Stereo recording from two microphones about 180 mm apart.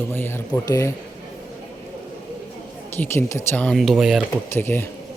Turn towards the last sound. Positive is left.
turn(degrees=10)  # may be behind; listen again after turning